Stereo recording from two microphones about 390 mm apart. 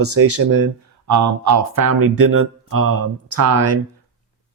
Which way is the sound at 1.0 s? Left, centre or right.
Right.